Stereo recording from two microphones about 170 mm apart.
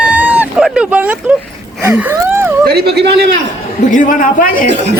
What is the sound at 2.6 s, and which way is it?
Speech, 70° right (ahead or behind).